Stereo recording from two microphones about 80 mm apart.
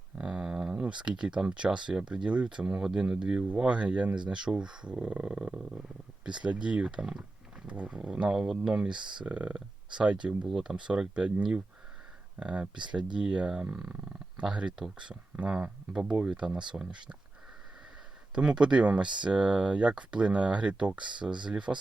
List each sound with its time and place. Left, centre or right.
0.2 s speech: centre
18.3 s speech: centre
21.0 s speech: right
21.7 s speech: centre